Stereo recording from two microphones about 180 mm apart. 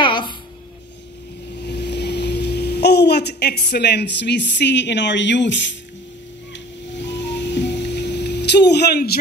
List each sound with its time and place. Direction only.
0.0 s music: 25° left (ahead or behind)
1.6 s speech: 70° left (ahead or behind)
6.9 s music: 75° left (ahead or behind)